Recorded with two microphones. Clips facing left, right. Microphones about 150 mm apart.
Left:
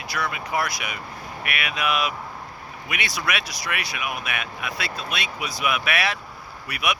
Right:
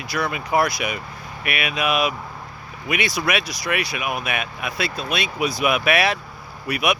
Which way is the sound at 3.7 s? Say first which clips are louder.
Right 5 dB; 20° right (ahead or behind).